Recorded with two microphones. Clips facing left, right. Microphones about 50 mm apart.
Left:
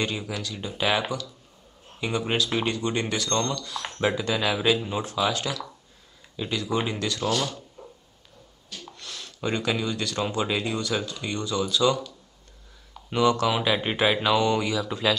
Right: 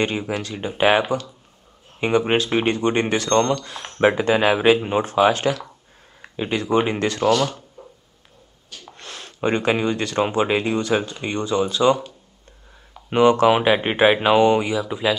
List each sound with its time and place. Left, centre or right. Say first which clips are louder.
0.0 s speech: right 6 dB; right
8.9 s speech: right 3 dB; right; by 15.1 s centre